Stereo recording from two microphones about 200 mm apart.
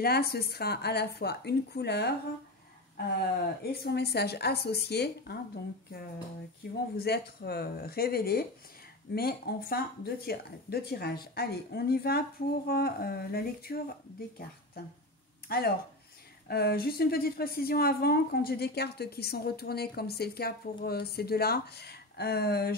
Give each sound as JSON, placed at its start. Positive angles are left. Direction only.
{"t": 0.0, "sound": "a woman's voice", "side_deg": 50}
{"t": 3.8, "sound": "a woman's voice", "side_deg": 55}
{"t": 6.6, "sound": "a woman's voice", "side_deg": 55}
{"t": 15.4, "sound": "a woman's voice", "side_deg": 50}